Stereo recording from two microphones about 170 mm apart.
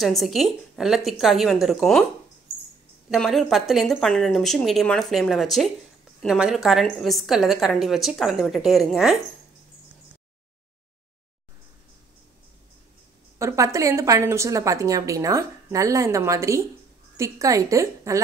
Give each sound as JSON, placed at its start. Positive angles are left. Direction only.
{"t": 0.0, "sound": "a woman's voice", "side_deg": 0}
{"t": 3.1, "sound": "a woman's voice", "side_deg": 0}
{"t": 13.4, "sound": "a woman's voice", "side_deg": -20}